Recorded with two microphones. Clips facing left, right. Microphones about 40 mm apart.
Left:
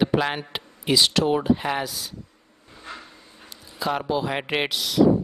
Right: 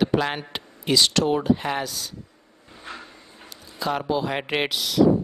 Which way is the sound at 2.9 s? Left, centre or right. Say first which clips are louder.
Right 1 dB; centre.